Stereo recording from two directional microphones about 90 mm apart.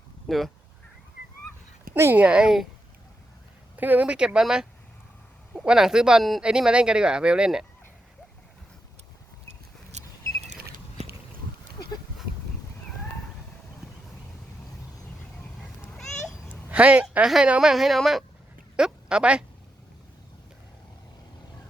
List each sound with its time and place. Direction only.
0.3 s a woman's voice: centre (ahead or behind)
2.1 s speech: 10° right (ahead or behind)
3.8 s speech: 20° right (ahead or behind)
5.6 s speech: 5° right (ahead or behind)
16.6 s a woman's voice: 15° right (ahead or behind)